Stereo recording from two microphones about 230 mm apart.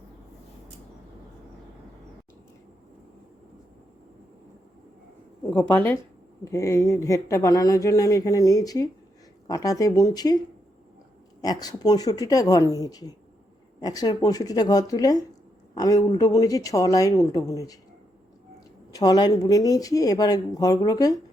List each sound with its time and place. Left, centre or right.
5.5 s speech: centre
18.9 s speech: centre